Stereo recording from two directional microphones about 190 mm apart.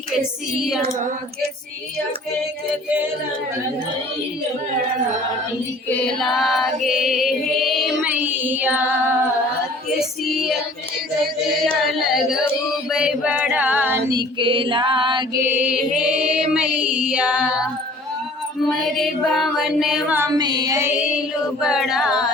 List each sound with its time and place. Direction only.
5.9 s music: centre (ahead or behind)
11.6 s music: centre (ahead or behind)
12.9 s singing: 5° right (ahead or behind)
14.1 s a sound: 25° right (ahead or behind); by 15.8 s 10° right (ahead or behind)
16.0 s female singing: 5° right (ahead or behind)
18.7 s music: centre (ahead or behind)